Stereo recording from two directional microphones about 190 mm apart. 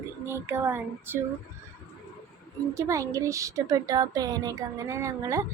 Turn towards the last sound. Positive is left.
turn(degrees=-15)  # may be behind; listen again after turning